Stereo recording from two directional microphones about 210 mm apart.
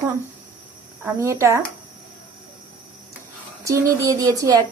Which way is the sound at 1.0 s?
15° right (ahead or behind).